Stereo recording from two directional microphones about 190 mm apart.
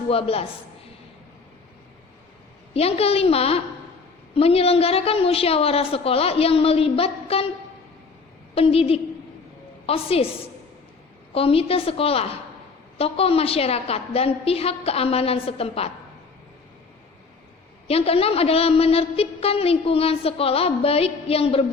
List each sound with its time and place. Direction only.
0.1 s a woman's voice: 30° left (ahead or behind)
2.7 s a woman's voice: 30° left (ahead or behind)
8.5 s a woman's voice: 30° left (ahead or behind)
17.8 s a woman's voice: 30° left (ahead or behind)